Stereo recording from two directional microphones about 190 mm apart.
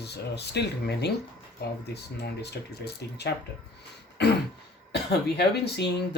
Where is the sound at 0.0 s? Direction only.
60° left (ahead or behind).